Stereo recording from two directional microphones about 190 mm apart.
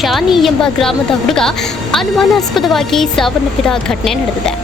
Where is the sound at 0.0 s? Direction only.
Centre (ahead or behind).